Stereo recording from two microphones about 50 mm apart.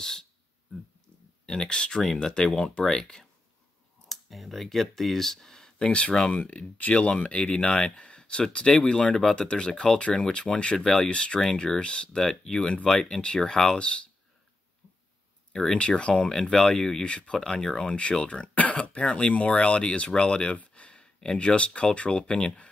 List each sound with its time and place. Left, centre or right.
0.0 s speech: centre
1.4 s speech: centre
4.1 s speech: centre
5.9 s speech: left
11.1 s speech: left
12.2 s speech: centre
15.5 s speech: centre